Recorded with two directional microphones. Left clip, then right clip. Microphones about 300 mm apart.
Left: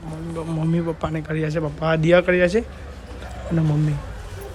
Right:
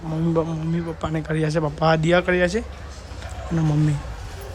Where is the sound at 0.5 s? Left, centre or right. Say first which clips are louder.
Left 4 dB; centre.